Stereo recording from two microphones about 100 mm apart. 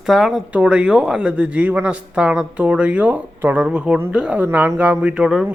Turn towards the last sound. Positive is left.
turn(degrees=-5)  # may be behind; listen again after turning